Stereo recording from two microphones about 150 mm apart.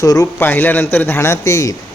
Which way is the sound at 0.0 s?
20° left (ahead or behind).